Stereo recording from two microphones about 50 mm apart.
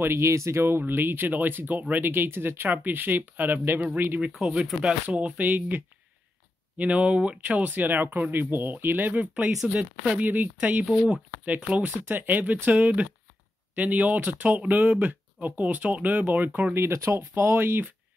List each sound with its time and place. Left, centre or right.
0.0 s speech: right
6.8 s speech: right
9.7 s speech: right
10.2 s speech: right
12.1 s speech: right
16.7 s speech: right
17.4 s speech: right